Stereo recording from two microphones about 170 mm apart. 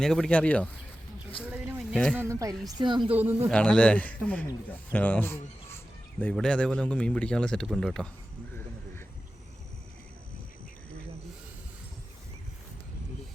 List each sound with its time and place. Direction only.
0.0 s a man's voice: 5° left (ahead or behind)
1.5 s a sound: 10° right (ahead or behind)
2.1 s speech: 15° right (ahead or behind)
3.1 s speech: 10° right (ahead or behind)
3.5 s a man's voice: 5° left (ahead or behind)
4.9 s a sound: 10° left (ahead or behind)
6.3 s a man's voice: 5° left (ahead or behind)